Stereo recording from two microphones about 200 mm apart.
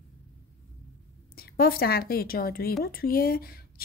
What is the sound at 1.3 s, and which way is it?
A woman's voice, 50° left (ahead or behind).